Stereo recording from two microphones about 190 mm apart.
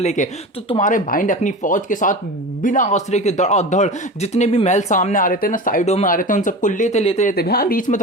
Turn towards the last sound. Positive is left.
turn(degrees=50)  # may be behind; listen again after turning